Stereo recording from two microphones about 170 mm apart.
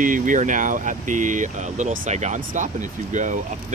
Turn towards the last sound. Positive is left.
turn(degrees=-45)  # may be behind; listen again after turning